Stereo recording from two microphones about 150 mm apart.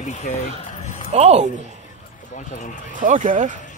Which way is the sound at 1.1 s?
45° right (ahead or behind).